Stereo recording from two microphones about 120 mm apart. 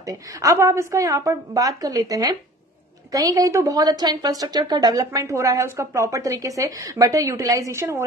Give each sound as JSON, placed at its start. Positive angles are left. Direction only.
{"t": 0.0, "sound": "a woman's voice", "side_deg": -30}